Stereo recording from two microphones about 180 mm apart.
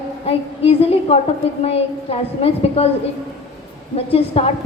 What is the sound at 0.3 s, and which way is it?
A woman's voice, 35° left (ahead or behind).